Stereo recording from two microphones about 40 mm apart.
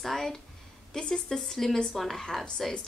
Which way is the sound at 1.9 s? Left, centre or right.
Centre.